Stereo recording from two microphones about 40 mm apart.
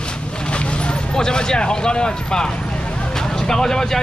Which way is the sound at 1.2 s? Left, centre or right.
Centre.